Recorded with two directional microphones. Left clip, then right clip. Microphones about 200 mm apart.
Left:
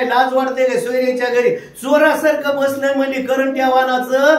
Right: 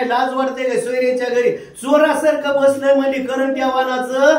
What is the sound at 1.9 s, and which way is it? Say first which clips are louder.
Speech: left 1 dB; 20° left (ahead or behind).